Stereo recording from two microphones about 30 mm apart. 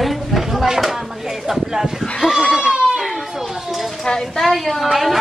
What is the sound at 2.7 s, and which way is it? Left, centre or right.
Baby cry, right.